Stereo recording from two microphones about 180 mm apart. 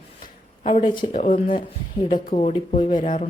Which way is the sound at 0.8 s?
45° left (ahead or behind).